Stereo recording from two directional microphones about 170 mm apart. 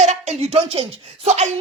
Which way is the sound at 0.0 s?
40° right (ahead or behind).